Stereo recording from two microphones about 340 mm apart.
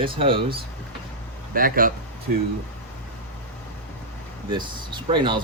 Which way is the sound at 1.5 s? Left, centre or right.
Right.